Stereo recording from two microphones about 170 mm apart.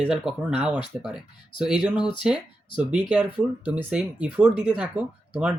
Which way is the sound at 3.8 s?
5° right (ahead or behind).